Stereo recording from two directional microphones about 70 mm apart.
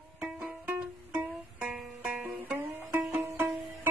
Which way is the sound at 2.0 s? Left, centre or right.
Right.